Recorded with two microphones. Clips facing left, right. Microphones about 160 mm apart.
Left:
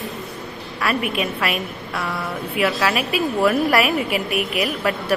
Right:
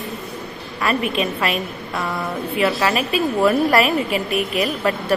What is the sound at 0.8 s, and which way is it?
A woman's voice, 5° left (ahead or behind).